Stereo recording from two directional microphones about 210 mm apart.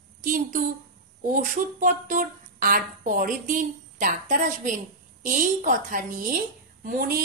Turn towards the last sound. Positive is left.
turn(degrees=-45)  # may be behind; listen again after turning